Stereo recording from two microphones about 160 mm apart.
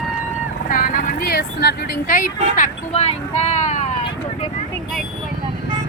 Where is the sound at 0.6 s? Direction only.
60° left (ahead or behind).